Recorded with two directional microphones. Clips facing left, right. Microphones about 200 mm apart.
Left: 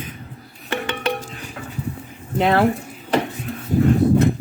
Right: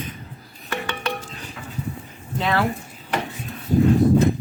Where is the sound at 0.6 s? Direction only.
25° left (ahead or behind).